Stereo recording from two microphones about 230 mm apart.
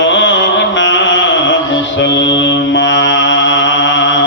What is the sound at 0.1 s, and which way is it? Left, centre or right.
Mantra, left.